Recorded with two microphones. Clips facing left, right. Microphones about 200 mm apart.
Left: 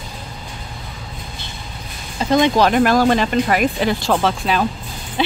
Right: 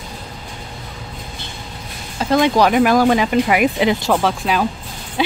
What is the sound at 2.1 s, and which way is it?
Speech, 5° right (ahead or behind).